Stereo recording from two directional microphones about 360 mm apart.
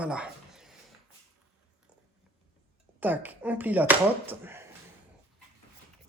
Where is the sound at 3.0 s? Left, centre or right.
Centre.